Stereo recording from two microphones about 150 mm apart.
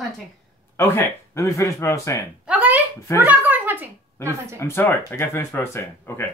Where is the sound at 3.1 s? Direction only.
10° right (ahead or behind).